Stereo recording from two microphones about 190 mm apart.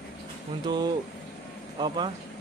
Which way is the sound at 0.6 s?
20° right (ahead or behind).